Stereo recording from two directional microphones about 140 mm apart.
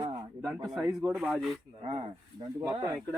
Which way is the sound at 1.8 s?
50° right (ahead or behind).